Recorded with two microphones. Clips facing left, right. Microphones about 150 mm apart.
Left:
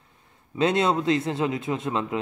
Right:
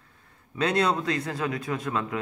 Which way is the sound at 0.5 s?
20° left (ahead or behind).